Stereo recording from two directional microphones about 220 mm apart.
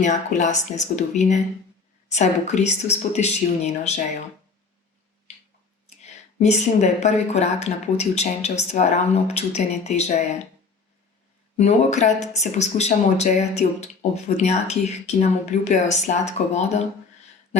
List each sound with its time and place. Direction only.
0.0 s speech: 35° left (ahead or behind)
6.0 s speech: 30° left (ahead or behind)
11.5 s speech: 30° left (ahead or behind)